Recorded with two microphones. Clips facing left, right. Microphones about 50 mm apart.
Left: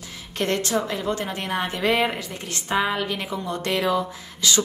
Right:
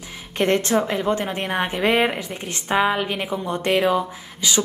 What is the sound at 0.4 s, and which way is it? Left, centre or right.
A woman's voice, right.